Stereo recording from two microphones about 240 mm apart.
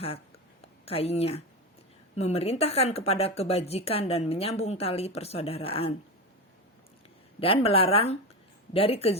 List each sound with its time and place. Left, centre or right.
0.9 s a woman's voice: left
7.3 s a woman's voice: left